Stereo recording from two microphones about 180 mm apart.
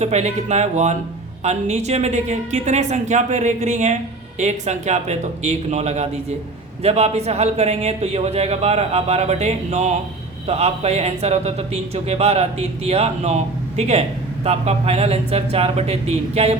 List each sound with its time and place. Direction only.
0.0 s speech: 35° right (ahead or behind)